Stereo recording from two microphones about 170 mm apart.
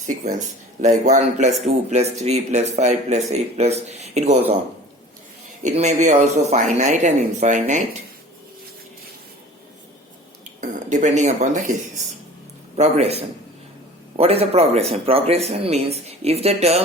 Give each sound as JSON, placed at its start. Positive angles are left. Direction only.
{"t": 0.1, "sound": "speech", "side_deg": -45}
{"t": 5.6, "sound": "speech", "side_deg": -45}
{"t": 10.6, "sound": "speech", "side_deg": -45}